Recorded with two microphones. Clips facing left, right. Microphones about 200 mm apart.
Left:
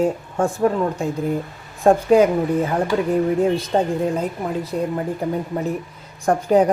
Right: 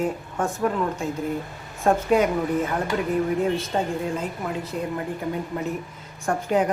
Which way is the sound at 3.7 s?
35° left (ahead or behind).